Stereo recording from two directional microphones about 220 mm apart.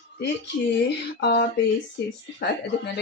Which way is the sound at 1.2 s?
50° left (ahead or behind).